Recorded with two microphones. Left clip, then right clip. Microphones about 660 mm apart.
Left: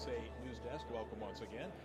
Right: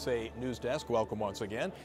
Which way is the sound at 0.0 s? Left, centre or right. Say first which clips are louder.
Right 10 dB; right.